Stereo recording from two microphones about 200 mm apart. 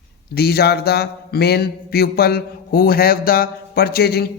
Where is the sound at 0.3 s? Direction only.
50° left (ahead or behind).